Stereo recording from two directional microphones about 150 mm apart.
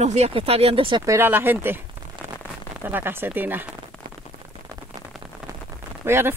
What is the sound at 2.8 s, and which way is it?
Speech, 15° right (ahead or behind).